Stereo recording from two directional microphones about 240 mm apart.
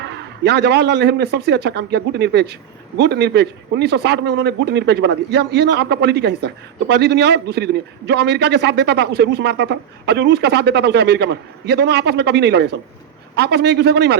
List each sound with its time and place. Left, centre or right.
0.0 s a man's voice: right